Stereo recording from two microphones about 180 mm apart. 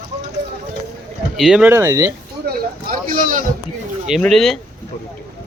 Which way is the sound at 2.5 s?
50° right (ahead or behind).